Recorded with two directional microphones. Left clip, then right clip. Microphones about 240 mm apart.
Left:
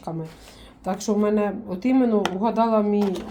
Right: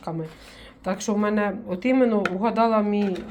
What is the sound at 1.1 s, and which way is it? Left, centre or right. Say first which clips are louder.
Speech: left 3 dB; centre.